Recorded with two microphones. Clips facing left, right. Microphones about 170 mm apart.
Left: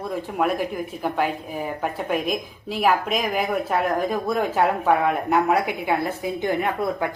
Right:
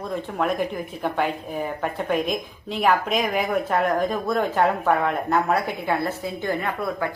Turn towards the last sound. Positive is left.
turn(degrees=20)  # may be behind; listen again after turning